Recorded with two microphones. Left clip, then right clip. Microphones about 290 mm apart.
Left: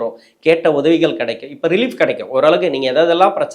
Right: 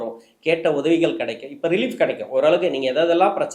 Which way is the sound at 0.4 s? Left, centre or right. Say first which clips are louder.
Left 7 dB; left.